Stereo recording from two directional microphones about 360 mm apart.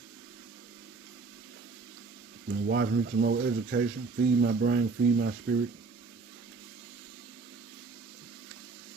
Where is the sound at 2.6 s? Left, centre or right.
Right.